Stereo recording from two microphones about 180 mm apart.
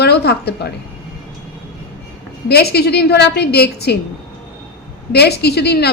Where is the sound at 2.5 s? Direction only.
65° left (ahead or behind).